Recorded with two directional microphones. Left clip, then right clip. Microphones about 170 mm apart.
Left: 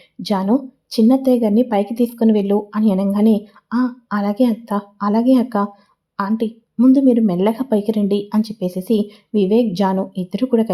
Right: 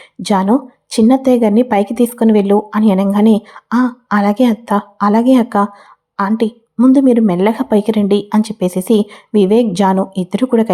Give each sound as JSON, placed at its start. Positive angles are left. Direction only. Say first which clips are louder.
{"t": 0.3, "sound": "a woman's voice", "louder": "right 5 dB", "side_deg": -20}